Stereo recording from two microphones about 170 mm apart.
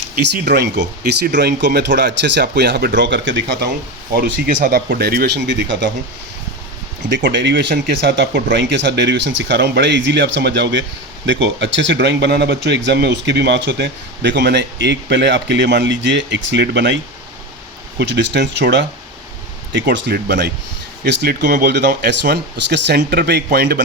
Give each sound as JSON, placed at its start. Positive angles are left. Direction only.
{"t": 0.4, "sound": "speech", "side_deg": -80}
{"t": 4.1, "sound": "speech", "side_deg": -65}
{"t": 7.1, "sound": "speech", "side_deg": -90}